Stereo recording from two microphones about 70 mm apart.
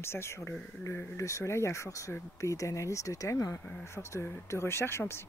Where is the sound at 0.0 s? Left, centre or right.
Left.